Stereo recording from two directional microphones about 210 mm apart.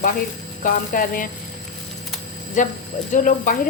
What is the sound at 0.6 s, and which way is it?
Speech, 40° left (ahead or behind).